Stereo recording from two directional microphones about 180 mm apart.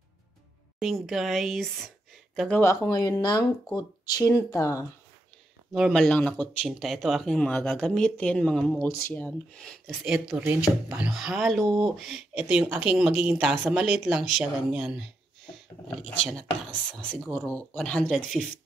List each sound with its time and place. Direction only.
0.7 s speech: centre (ahead or behind); by 4.8 s 15° left (ahead or behind)
5.7 s speech: centre (ahead or behind)
8.8 s speech: 15° left (ahead or behind); by 15.0 s 5° right (ahead or behind)
16.9 s speech: centre (ahead or behind)